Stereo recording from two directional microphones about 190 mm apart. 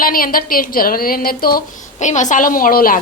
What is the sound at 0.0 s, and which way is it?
A woman's voice, 50° left (ahead or behind).